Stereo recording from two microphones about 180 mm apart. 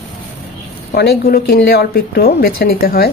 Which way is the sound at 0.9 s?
65° left (ahead or behind).